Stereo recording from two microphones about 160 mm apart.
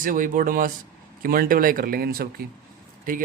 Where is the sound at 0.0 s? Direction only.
55° right (ahead or behind).